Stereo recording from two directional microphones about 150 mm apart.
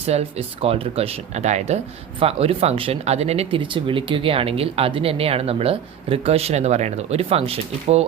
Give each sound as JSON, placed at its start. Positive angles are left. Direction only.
{"t": 0.0, "sound": "speech", "side_deg": -45}